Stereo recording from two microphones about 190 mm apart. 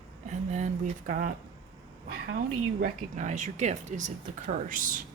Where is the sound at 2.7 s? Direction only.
50° right (ahead or behind).